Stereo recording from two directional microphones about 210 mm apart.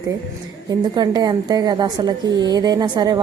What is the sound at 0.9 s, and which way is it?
A woman's voice, 20° right (ahead or behind).